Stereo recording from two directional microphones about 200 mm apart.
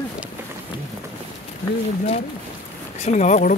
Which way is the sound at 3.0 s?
35° left (ahead or behind).